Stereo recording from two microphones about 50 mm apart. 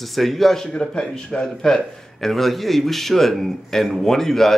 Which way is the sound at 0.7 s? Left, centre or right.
Centre.